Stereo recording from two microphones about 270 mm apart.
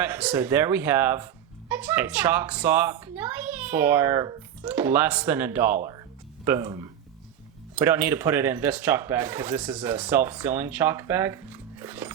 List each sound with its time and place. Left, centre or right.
0.0 s speech: centre